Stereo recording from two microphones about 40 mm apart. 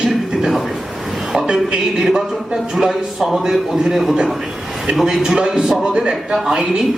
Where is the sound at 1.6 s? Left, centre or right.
Centre.